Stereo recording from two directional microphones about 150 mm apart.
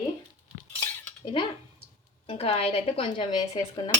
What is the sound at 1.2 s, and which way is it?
Speech, 35° left (ahead or behind).